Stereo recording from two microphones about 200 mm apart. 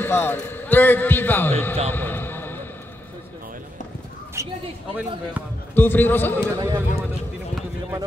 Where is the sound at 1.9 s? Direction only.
10° left (ahead or behind).